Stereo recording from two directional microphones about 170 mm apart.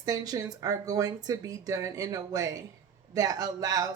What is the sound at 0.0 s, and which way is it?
Speech, 20° right (ahead or behind).